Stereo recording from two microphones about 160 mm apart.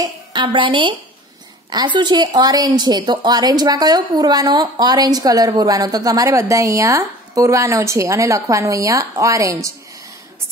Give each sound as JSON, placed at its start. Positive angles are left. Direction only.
{"t": 0.0, "sound": "a woman's voice", "side_deg": -30}